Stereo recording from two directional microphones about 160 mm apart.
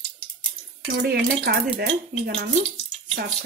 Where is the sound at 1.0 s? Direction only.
90° right.